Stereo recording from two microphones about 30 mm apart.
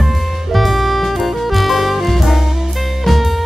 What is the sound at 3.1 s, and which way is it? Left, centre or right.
Music, centre.